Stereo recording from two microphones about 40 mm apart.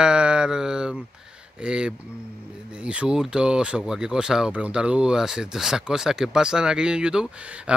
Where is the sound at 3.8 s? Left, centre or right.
Centre.